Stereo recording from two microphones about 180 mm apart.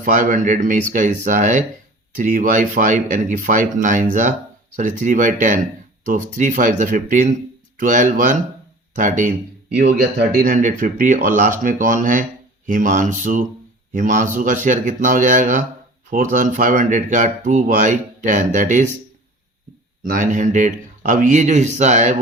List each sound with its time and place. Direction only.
0.0 s speech: 45° right (ahead or behind)
10.0 s speech: 60° right (ahead or behind); by 18.9 s 45° right (ahead or behind)
20.0 s speech: 50° right (ahead or behind)